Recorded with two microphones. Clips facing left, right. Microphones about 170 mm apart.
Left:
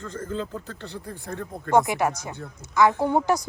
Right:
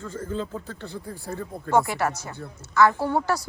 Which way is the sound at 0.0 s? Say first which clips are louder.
Even; 10° right (ahead or behind).